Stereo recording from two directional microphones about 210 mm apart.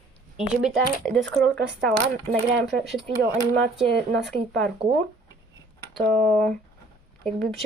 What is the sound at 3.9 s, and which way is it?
Speech, 55° right (ahead or behind).